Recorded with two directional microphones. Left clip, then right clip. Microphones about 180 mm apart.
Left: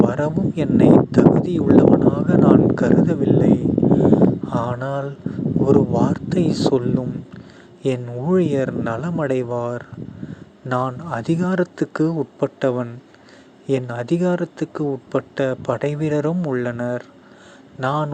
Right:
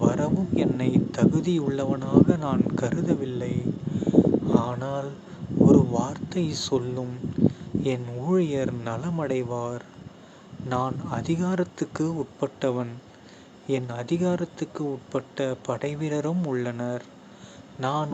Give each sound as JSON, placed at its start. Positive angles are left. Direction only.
{"t": 0.0, "sound": "speech", "side_deg": 30}